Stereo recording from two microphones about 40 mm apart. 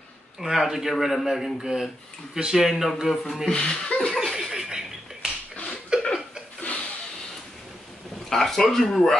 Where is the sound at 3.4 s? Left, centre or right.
Centre.